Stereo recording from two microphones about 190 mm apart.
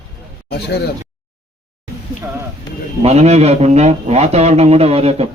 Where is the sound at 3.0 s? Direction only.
35° right (ahead or behind).